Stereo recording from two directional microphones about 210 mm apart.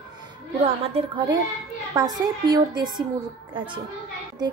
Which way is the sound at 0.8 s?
25° right (ahead or behind).